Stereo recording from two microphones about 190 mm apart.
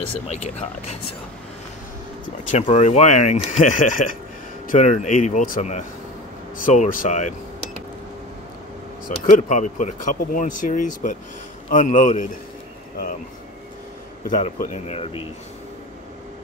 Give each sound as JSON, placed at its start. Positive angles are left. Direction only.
{"t": 0.3, "sound": "speech", "side_deg": 35}
{"t": 2.5, "sound": "speech", "side_deg": 40}
{"t": 9.2, "sound": "speech", "side_deg": 40}
{"t": 14.3, "sound": "speech", "side_deg": 40}